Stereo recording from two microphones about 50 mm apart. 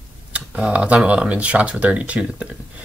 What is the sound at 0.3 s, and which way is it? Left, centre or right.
Speech, right.